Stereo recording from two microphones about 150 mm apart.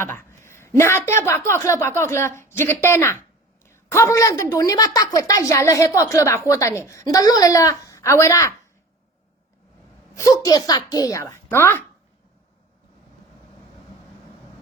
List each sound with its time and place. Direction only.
0.0 s a woman's voice: 15° left (ahead or behind)
10.2 s a woman's voice: 25° left (ahead or behind)